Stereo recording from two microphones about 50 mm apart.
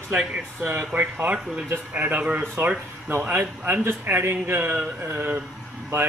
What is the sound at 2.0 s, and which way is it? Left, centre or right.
Speech, right.